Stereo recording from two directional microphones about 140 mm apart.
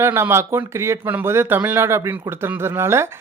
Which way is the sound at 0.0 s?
15° right (ahead or behind).